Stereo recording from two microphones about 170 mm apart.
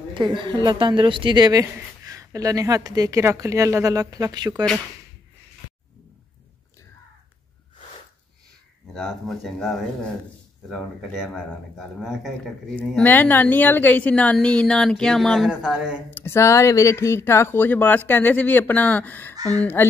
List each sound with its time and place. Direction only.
0.1 s a woman's voice: 30° right (ahead or behind)
8.9 s a woman's voice: centre (ahead or behind)
11.1 s a woman's voice: 5° right (ahead or behind)
16.1 s speech: 15° left (ahead or behind)